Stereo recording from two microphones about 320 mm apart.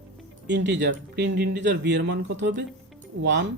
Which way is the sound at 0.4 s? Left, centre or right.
Right.